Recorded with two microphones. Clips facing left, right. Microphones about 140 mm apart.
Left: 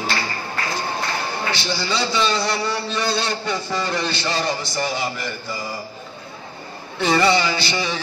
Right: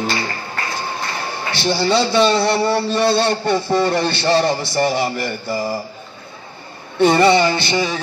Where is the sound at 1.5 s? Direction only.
60° right (ahead or behind).